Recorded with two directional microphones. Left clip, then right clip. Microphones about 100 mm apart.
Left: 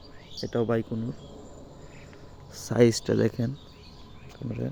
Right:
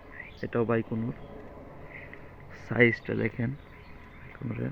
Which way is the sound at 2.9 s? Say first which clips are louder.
Left 5 dB; 55° left (ahead or behind).